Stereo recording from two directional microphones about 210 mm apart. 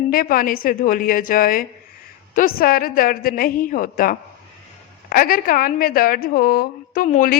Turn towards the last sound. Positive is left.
turn(degrees=40)  # may be behind; listen again after turning